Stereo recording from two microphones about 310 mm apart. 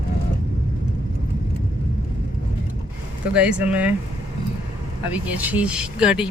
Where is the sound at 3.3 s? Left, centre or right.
Centre.